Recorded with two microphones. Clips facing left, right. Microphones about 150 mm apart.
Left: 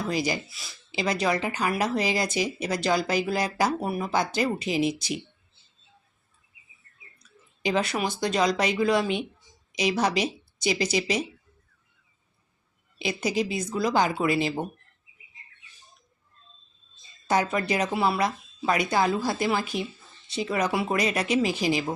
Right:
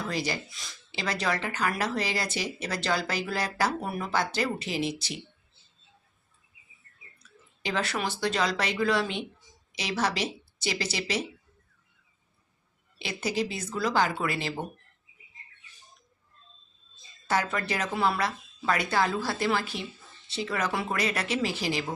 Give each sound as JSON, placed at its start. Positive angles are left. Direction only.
{"t": 0.1, "sound": "speech", "side_deg": 15}
{"t": 7.2, "sound": "speech", "side_deg": 15}
{"t": 13.0, "sound": "speech", "side_deg": 15}
{"t": 17.2, "sound": "speech", "side_deg": 15}